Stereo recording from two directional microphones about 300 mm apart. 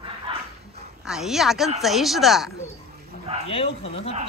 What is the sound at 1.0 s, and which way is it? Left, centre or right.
Speech, centre.